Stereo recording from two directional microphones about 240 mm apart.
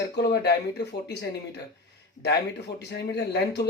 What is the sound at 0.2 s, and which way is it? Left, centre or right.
Speech, left.